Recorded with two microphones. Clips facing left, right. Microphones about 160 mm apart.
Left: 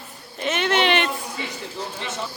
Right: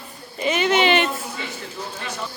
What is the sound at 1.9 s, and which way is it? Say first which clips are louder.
Speech: left 1 dB; 20° left (ahead or behind).